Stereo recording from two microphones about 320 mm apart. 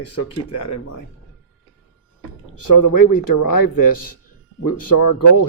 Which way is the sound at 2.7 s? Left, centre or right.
Left.